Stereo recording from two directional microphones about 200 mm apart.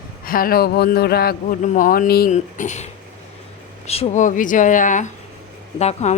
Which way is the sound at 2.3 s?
35° left (ahead or behind).